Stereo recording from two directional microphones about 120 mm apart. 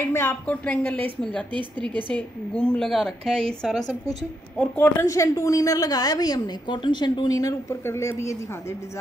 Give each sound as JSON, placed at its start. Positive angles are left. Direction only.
{"t": 0.0, "sound": "a woman's voice", "side_deg": 20}
{"t": 1.5, "sound": "a woman's voice", "side_deg": -40}
{"t": 2.1, "sound": "a woman's voice", "side_deg": 10}
{"t": 4.6, "sound": "a woman's voice", "side_deg": 20}